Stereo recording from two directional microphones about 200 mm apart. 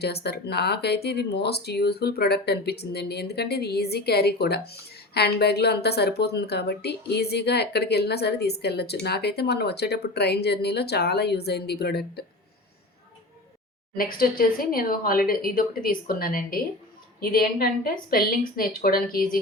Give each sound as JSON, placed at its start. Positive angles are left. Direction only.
{"t": 0.0, "sound": "speech", "side_deg": 55}
{"t": 13.9, "sound": "speech", "side_deg": 45}